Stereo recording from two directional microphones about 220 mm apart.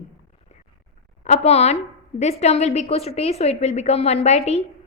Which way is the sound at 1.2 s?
30° left (ahead or behind).